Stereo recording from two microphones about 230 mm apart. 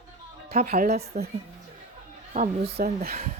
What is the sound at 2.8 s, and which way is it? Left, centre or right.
Speech, right.